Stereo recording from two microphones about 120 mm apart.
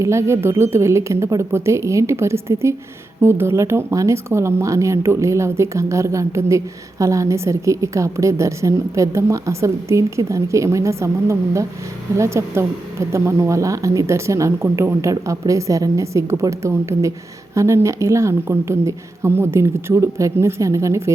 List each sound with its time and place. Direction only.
0.0 s speech: 25° right (ahead or behind)